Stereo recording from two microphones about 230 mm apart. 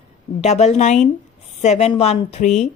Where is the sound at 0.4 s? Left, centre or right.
Left.